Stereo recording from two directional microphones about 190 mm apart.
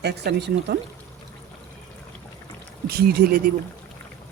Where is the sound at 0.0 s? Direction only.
60° right (ahead or behind).